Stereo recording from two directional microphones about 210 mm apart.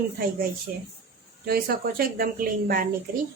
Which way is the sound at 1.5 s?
45° right (ahead or behind).